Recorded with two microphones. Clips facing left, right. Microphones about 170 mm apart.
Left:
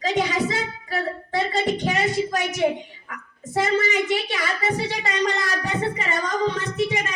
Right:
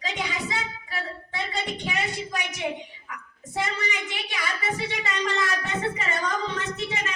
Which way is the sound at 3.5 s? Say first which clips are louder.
Left 8 dB; 45° left (ahead or behind).